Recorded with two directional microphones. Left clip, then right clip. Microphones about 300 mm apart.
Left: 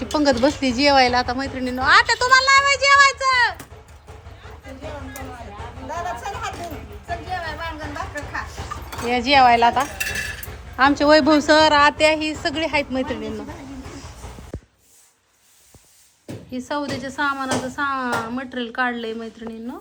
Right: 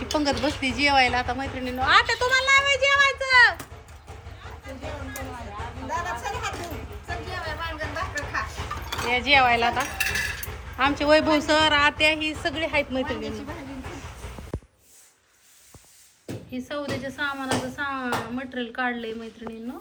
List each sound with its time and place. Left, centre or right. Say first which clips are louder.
0.1 s a woman's voice: left 7 dB; centre
4.4 s music: left 1 dB; centre
7.6 s a sound: left 1 dB; centre
8.9 s speech: left 2 dB; centre
16.2 s speech: left 4 dB; centre